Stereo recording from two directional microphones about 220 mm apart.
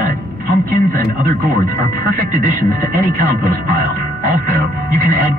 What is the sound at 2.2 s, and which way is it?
Speech, 40° right (ahead or behind).